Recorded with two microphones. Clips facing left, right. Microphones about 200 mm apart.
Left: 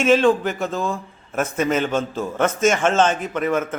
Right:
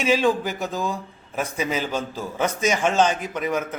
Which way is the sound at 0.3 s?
Centre (ahead or behind).